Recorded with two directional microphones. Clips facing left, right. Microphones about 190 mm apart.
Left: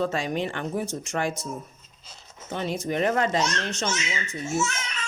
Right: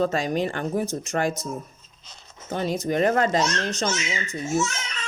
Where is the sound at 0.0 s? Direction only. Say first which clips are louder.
Right 3 dB; 40° right (ahead or behind).